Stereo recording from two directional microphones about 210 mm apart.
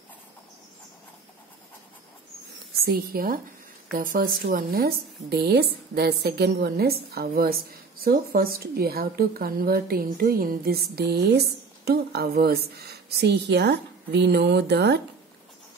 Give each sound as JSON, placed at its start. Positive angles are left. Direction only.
{"t": 2.8, "sound": "a woman's voice", "side_deg": -45}